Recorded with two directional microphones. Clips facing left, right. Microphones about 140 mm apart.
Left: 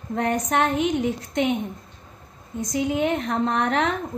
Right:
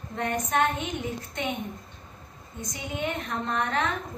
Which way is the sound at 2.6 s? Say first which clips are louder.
Left 9 dB; 90° left.